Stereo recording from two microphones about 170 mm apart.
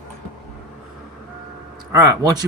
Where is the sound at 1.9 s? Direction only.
20° right (ahead or behind).